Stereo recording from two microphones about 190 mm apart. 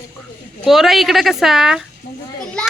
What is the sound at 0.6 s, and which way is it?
Speech, centre (ahead or behind).